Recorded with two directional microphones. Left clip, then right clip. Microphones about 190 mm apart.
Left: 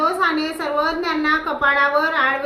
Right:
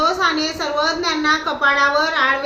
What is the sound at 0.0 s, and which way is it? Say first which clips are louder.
A woman's voice: right 1 dB; 15° left (ahead or behind).